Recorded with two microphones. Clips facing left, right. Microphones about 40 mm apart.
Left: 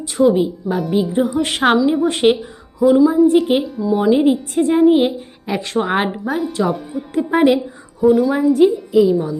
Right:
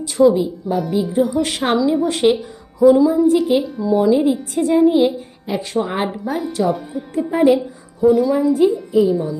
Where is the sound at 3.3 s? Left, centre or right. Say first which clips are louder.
Left 1 dB; left.